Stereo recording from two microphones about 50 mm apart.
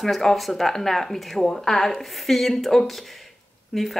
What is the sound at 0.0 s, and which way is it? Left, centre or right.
Speech, centre.